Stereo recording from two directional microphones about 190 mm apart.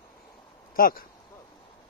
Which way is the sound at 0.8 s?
50° left (ahead or behind).